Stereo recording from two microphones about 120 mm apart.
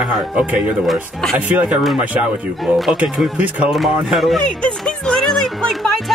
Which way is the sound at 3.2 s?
10° right (ahead or behind).